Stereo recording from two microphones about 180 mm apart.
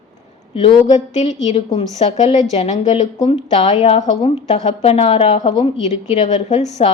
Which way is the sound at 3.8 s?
40° left (ahead or behind).